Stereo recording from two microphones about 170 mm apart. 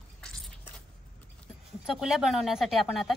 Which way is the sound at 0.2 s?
5° left (ahead or behind).